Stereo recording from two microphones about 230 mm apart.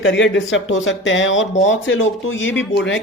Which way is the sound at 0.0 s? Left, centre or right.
Left.